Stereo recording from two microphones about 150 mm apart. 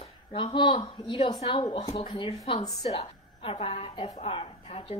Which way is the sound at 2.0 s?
35° left (ahead or behind).